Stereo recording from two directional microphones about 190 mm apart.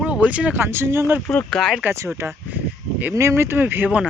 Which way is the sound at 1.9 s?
15° right (ahead or behind).